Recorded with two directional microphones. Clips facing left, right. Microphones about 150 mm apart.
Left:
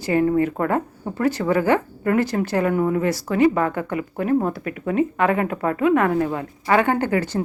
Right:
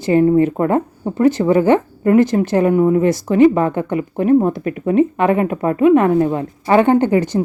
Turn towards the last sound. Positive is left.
turn(degrees=-20)  # may be behind; listen again after turning